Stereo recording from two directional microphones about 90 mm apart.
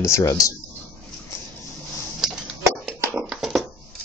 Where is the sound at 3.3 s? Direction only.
Centre (ahead or behind).